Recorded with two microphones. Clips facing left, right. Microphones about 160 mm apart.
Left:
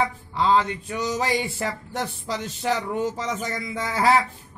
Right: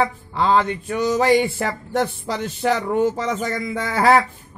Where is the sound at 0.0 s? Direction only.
60° right (ahead or behind).